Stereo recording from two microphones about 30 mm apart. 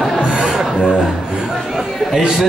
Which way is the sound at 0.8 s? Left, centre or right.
Centre.